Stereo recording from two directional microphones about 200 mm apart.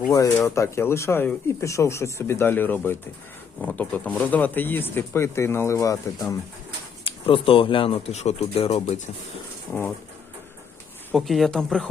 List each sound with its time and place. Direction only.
0.3 s speech: 15° left (ahead or behind)
7.0 s speech: 25° left (ahead or behind)
11.1 s speech: centre (ahead or behind)